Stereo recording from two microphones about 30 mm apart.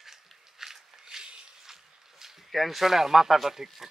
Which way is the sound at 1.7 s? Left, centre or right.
Centre.